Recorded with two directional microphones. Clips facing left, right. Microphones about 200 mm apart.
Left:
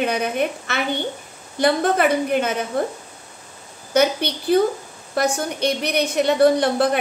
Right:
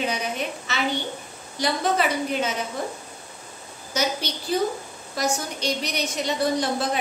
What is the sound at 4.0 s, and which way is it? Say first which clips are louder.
A woman's voice: left 8 dB; 60° left (ahead or behind).